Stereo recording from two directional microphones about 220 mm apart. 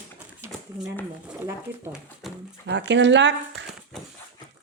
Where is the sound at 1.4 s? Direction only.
10° right (ahead or behind).